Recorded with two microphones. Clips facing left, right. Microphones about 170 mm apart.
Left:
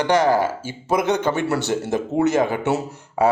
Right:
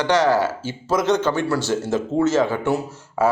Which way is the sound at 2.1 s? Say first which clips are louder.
Even; 15° left (ahead or behind).